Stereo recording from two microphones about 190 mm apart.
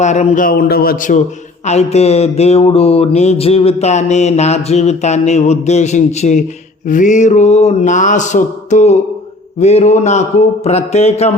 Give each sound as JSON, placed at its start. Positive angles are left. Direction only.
{"t": 0.0, "sound": "a man's voice", "side_deg": 40}
{"t": 1.6, "sound": "mantra", "side_deg": 35}